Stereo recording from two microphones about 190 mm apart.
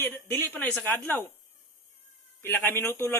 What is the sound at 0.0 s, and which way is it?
A man's voice, 10° left (ahead or behind).